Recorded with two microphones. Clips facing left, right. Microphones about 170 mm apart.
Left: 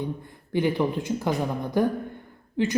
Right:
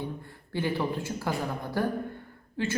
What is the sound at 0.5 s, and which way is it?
Speech, 15° left (ahead or behind).